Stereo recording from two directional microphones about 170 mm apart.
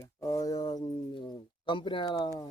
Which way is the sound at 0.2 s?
20° left (ahead or behind).